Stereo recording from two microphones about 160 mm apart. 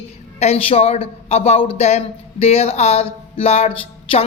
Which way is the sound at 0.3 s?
40° left (ahead or behind).